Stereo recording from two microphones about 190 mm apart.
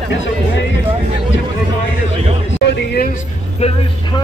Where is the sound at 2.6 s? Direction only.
60° left (ahead or behind).